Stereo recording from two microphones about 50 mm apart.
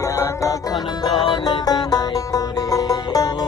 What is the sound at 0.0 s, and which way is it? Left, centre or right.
Music, left.